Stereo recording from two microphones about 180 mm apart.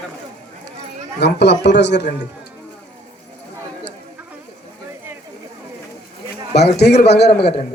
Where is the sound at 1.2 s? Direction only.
70° left (ahead or behind).